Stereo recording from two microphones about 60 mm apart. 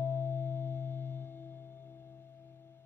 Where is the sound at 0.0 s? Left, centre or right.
Left.